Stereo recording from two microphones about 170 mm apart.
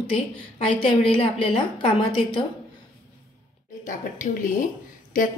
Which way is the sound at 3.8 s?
50° left (ahead or behind).